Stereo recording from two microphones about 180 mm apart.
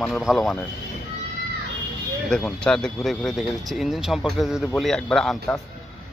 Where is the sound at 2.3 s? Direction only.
5° left (ahead or behind).